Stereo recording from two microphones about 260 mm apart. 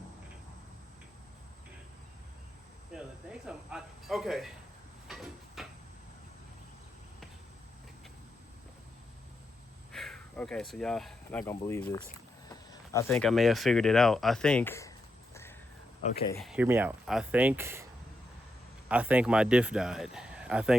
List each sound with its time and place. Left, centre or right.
2.9 s cricket: centre
3.4 s speech: centre
5.0 s a sound: centre
9.9 s speech: centre
16.0 s speech: left
16.4 s speech: centre
18.9 s speech: centre